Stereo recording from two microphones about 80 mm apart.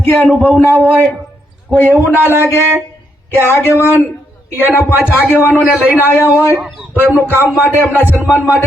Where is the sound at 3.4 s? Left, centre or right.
Left.